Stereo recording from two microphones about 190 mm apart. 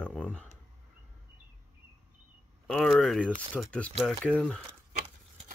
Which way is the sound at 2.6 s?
Centre (ahead or behind).